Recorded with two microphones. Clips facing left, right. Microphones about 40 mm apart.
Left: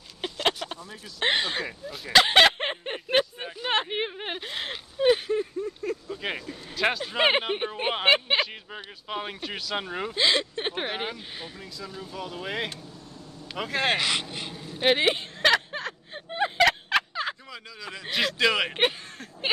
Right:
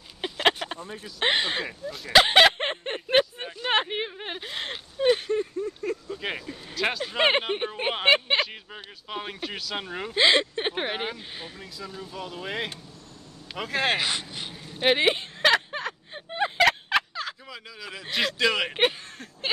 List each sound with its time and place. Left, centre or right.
0.4 s a sound: right
1.2 s speech: centre
2.1 s a sound: centre
4.0 s a sound: centre
4.4 s speech: centre
10.1 s speech: right; by 14.0 s centre
14.1 s speech: left
14.5 s whimper: centre
17.1 s turkey: left
17.5 s speech: centre